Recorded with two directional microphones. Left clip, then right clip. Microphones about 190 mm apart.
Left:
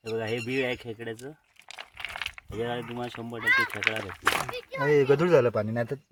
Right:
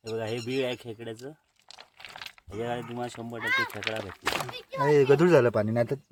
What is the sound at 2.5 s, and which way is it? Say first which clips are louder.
Speech: even; centre (ahead or behind).